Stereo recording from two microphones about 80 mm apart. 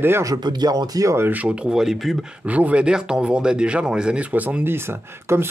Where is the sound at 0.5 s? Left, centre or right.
Right.